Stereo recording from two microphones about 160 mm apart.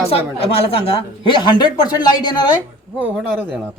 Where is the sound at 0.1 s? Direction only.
35° left (ahead or behind).